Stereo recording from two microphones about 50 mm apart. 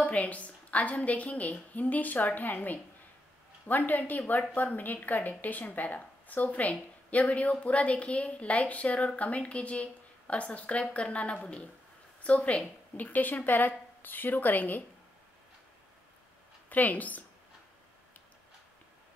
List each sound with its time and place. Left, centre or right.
0.0 s a woman's voice: left
16.6 s a woman's voice: left